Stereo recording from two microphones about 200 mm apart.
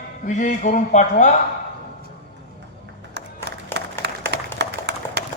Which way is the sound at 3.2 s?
55° right (ahead or behind).